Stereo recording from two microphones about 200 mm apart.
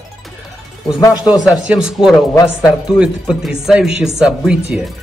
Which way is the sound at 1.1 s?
5° right (ahead or behind).